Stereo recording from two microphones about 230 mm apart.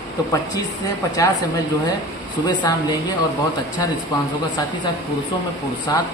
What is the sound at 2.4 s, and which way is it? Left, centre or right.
Speech, centre.